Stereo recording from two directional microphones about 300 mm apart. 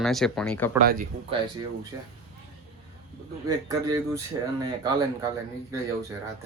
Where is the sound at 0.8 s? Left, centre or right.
Right.